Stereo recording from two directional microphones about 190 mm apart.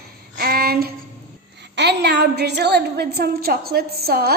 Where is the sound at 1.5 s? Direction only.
65° right (ahead or behind).